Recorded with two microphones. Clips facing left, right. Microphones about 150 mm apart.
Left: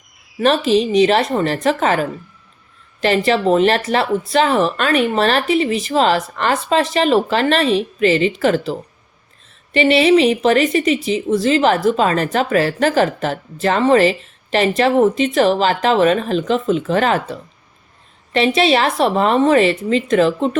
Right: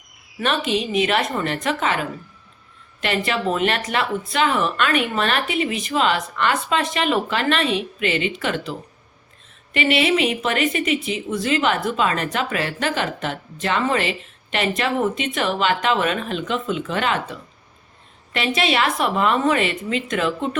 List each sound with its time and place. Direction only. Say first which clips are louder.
0.3 s a woman's voice: left 8 dB; 35° left (ahead or behind)
9.7 s a woman's voice: left 7 dB; 30° left (ahead or behind)
18.3 s a woman's voice: left 7 dB; 35° left (ahead or behind)